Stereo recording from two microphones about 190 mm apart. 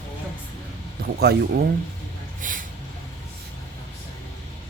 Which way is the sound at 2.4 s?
45° right (ahead or behind).